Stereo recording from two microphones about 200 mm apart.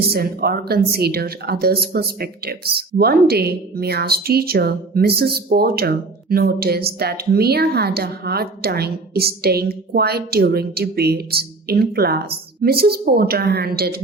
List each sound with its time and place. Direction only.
0.1 s speech: 50° right (ahead or behind)